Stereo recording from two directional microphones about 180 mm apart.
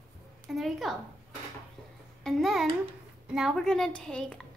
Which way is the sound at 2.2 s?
Centre (ahead or behind).